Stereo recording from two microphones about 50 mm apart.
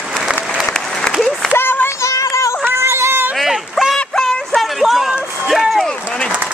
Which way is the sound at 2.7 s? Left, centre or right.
Right.